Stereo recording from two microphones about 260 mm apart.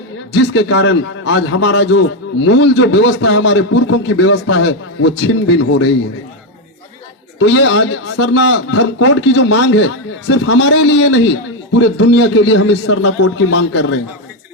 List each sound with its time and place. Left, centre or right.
0.3 s a man's voice: left
7.3 s a man's voice: left